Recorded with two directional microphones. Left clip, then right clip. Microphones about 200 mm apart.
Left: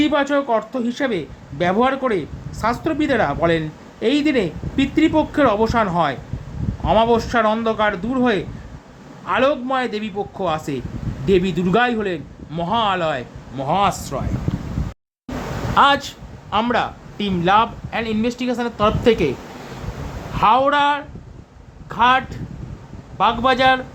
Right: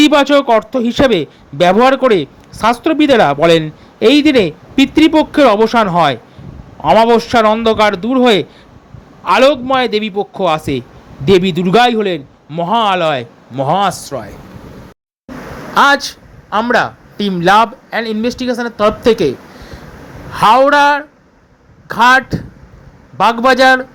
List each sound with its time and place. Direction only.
0.0 s speech: 35° right (ahead or behind); by 14.3 s 20° right (ahead or behind)
15.7 s speech: 25° right (ahead or behind)
20.3 s speech: 30° right (ahead or behind)